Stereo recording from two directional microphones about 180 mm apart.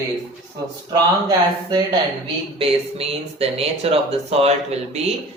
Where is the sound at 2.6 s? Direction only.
35° right (ahead or behind).